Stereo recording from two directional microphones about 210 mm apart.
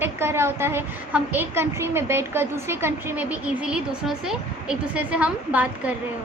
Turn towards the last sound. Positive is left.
turn(degrees=-5)  # may be behind; listen again after turning